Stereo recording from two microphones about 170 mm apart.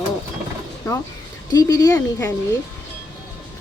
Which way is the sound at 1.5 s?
20° left (ahead or behind).